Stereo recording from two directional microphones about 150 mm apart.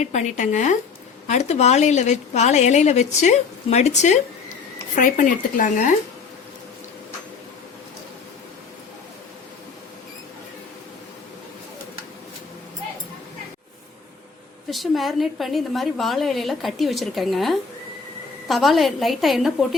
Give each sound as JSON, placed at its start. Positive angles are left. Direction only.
{"t": 0.0, "sound": "a woman's voice", "side_deg": 50}
{"t": 4.9, "sound": "speech", "side_deg": 60}
{"t": 14.7, "sound": "a woman's voice", "side_deg": 0}